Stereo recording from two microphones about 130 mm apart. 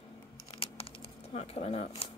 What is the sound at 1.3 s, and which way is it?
Speech, 55° left (ahead or behind).